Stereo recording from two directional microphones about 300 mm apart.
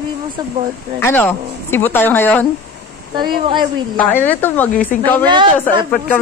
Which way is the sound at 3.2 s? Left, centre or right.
Centre.